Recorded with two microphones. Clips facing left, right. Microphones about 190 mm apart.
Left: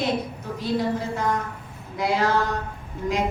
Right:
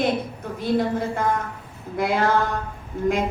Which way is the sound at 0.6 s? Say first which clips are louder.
Right 3 dB; 55° right (ahead or behind).